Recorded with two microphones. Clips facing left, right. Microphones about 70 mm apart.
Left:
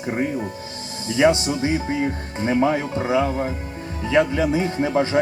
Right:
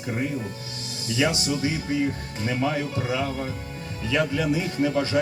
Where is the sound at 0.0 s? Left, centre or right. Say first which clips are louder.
Left 4 dB; left.